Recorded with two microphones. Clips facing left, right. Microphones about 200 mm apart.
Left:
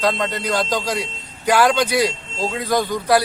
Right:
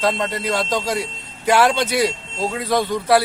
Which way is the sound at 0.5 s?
25° right (ahead or behind).